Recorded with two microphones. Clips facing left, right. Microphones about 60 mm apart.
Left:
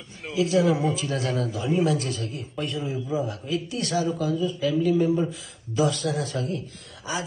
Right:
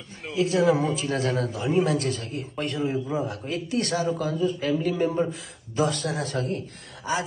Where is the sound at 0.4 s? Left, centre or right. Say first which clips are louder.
Even; right.